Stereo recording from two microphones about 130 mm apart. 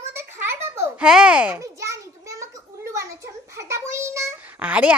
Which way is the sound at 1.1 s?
5° right (ahead or behind).